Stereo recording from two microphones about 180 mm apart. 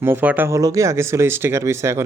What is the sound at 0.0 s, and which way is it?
Speech, 10° right (ahead or behind).